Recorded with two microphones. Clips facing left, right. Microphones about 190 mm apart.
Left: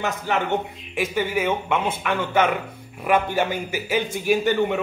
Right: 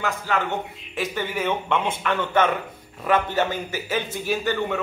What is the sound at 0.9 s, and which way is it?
A man's voice, 10° left (ahead or behind).